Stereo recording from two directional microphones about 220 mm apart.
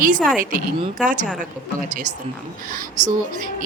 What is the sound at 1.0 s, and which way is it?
Speech, 35° right (ahead or behind).